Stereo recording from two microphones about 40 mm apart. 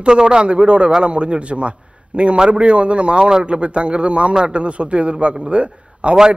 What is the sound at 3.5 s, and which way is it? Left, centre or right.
A man's voice, right.